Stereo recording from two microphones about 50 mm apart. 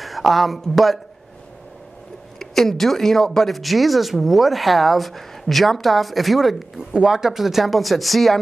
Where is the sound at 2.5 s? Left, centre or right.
Centre.